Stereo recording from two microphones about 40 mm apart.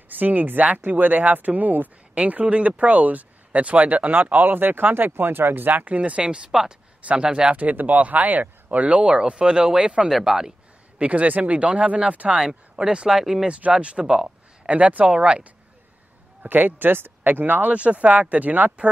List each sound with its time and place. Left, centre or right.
0.1 s speech: right
6.5 s speech: centre
7.5 s speech: right; by 10.5 s centre
11.0 s speech: right
12.4 s speech: centre
13.5 s speech: right
14.0 s speech: centre
14.7 s speech: right
16.4 s speech: right
17.7 s speech: right